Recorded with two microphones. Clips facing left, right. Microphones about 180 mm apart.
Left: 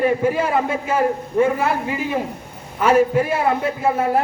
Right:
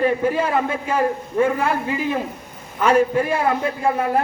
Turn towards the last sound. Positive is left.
turn(degrees=5)  # may be behind; listen again after turning